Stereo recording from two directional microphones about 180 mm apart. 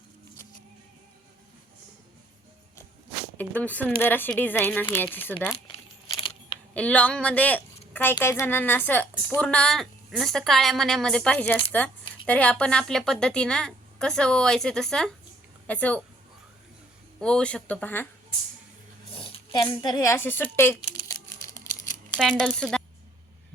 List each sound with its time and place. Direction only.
3.3 s speech: 10° left (ahead or behind)
6.1 s a sound: 25° left (ahead or behind)
6.7 s a woman's voice: 10° left (ahead or behind)
17.2 s speech: 5° left (ahead or behind)
19.1 s a woman's voice: 30° left (ahead or behind); by 20.7 s 10° left (ahead or behind)
21.1 s typing: 15° left (ahead or behind)
22.1 s a woman's voice: 5° left (ahead or behind)